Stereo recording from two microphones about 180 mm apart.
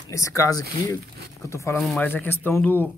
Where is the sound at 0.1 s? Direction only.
15° left (ahead or behind).